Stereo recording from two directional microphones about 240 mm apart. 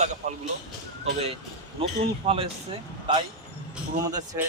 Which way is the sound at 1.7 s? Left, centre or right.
Right.